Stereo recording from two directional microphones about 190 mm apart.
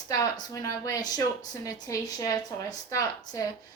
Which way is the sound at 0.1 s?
20° left (ahead or behind).